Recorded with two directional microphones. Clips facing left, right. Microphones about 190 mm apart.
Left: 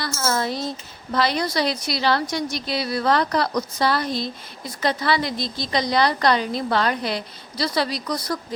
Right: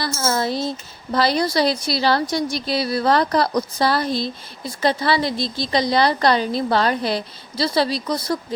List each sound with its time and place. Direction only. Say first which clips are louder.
0.0 s a woman's voice: right 2 dB; 30° right (ahead or behind)